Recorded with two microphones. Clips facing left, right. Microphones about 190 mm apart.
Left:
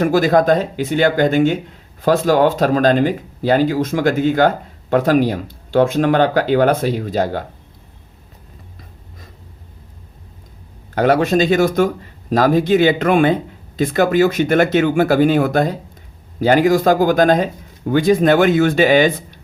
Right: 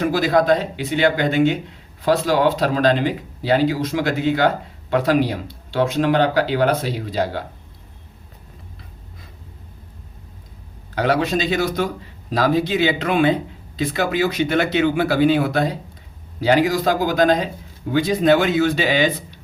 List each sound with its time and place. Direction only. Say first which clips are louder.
0.0 s speech: left 4 dB; 50° left (ahead or behind)
10.9 s speech: left 5 dB; 50° left (ahead or behind)